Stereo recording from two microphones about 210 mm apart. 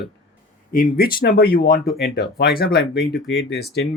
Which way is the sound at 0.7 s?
45° left (ahead or behind).